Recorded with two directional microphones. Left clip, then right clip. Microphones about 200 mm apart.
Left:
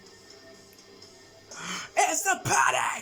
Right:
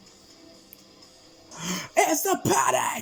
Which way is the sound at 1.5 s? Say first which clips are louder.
Right 3 dB; 20° right (ahead or behind).